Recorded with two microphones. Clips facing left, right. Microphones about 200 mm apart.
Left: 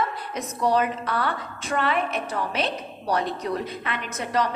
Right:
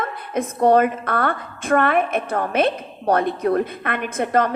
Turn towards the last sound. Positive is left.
turn(degrees=-55)  # may be behind; listen again after turning